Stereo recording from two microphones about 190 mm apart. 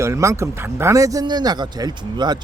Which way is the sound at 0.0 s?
15° right (ahead or behind).